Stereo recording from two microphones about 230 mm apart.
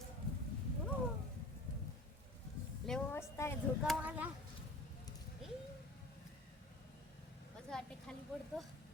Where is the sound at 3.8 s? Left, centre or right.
Centre.